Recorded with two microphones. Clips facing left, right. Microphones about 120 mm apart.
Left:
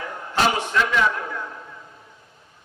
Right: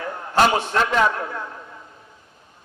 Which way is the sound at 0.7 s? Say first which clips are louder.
Even; 40° right (ahead or behind).